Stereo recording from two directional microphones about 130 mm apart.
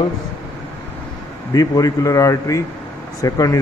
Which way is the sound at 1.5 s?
30° left (ahead or behind).